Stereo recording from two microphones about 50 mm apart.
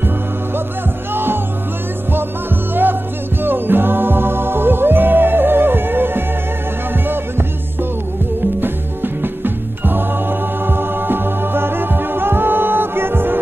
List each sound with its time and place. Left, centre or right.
1.1 s music: right
2.7 s music: right
8.5 s music: right